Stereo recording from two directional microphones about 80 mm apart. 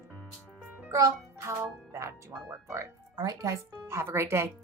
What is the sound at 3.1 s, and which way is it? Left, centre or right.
Speech, right.